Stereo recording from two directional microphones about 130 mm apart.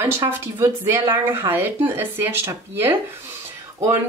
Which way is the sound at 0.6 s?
20° right (ahead or behind).